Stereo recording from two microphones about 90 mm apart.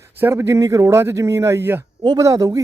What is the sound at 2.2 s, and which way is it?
Speech, 40° right (ahead or behind).